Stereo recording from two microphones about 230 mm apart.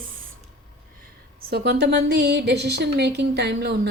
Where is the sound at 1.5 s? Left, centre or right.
Right.